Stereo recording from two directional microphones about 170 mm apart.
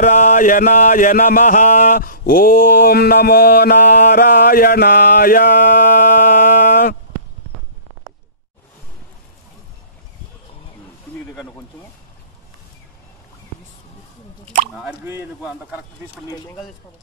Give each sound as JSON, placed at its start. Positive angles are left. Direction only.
{"t": 0.0, "sound": "mantra", "side_deg": 50}